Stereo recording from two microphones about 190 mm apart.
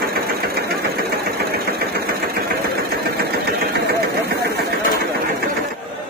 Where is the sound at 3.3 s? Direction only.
55° right (ahead or behind).